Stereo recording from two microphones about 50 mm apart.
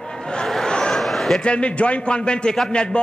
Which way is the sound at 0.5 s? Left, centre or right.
Centre.